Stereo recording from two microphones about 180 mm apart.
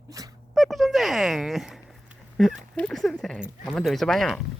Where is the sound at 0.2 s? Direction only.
20° right (ahead or behind).